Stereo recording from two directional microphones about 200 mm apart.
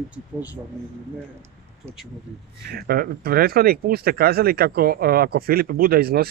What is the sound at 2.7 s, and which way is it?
Speech, 50° right (ahead or behind).